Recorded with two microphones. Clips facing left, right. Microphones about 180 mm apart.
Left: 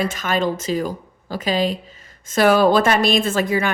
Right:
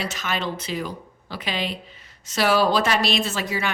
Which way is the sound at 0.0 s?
50° left (ahead or behind).